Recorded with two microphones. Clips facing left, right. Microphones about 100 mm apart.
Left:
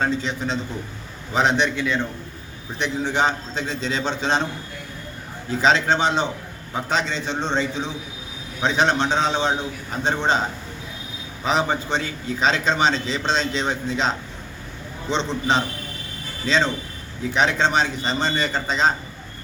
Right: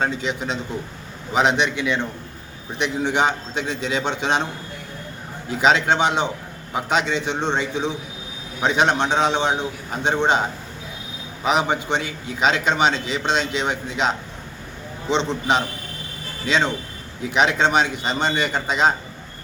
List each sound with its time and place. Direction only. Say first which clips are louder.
0.0 s a man's voice: even; 15° right (ahead or behind)
3.1 s a man's voice: even; 15° right (ahead or behind)
5.5 s a man's voice: right 1 dB; 15° right (ahead or behind)
11.4 s a man's voice: right 1 dB; 15° right (ahead or behind)
15.1 s a man's voice: right 1 dB; 15° right (ahead or behind)